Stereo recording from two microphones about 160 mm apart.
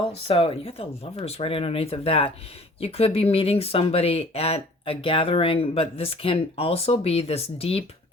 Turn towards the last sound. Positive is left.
turn(degrees=40)  # may be behind; listen again after turning